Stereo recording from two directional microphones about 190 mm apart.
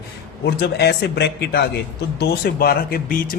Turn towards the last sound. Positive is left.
turn(degrees=50)  # may be behind; listen again after turning